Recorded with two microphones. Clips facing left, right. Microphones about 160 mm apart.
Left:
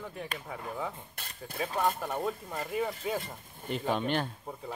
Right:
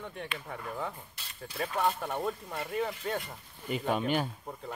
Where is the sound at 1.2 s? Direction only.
55° left (ahead or behind).